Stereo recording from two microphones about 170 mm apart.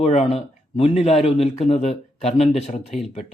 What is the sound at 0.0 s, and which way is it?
Speech, 40° left (ahead or behind).